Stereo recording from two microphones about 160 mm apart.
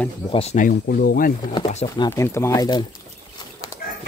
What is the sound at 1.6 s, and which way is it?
Speech, 45° left (ahead or behind).